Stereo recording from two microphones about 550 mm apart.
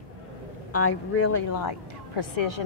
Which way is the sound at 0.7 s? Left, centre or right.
Left.